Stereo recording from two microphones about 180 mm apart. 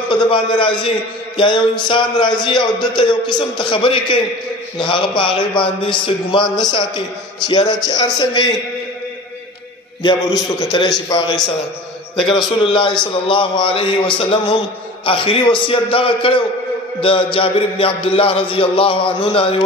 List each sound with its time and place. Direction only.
0.1 s a man's voice: 25° left (ahead or behind)
10.0 s speech: 25° left (ahead or behind)
12.2 s a man's voice: centre (ahead or behind)
12.6 s speech: 30° left (ahead or behind)